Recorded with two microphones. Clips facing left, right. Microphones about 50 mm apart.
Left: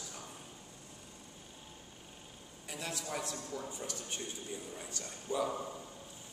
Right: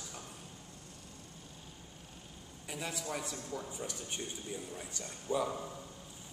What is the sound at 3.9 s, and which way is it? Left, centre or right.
Speech, centre.